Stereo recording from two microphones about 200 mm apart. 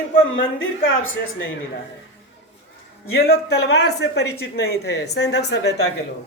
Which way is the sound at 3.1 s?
50° left (ahead or behind).